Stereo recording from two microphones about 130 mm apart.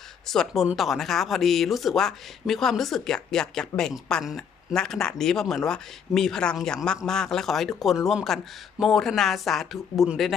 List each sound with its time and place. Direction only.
0.3 s speech: 5° left (ahead or behind)